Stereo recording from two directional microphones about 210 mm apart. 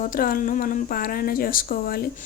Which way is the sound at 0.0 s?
40° left (ahead or behind).